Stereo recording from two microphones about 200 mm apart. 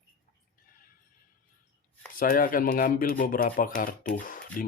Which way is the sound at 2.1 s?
45° left (ahead or behind).